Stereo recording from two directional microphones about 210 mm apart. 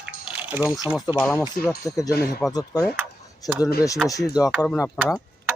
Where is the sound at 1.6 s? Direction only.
45° left (ahead or behind).